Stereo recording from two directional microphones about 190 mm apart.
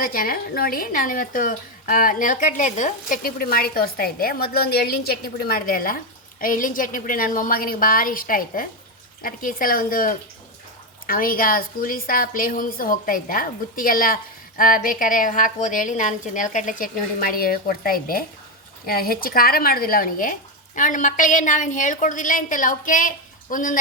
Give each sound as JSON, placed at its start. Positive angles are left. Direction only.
{"t": 0.0, "sound": "a woman's voice", "side_deg": 50}